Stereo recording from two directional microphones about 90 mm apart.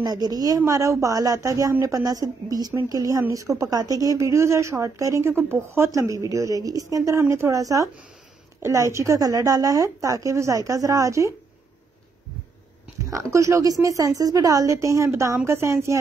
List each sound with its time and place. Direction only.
0.0 s a woman's voice: 45° right (ahead or behind)
13.0 s a woman's voice: 35° right (ahead or behind)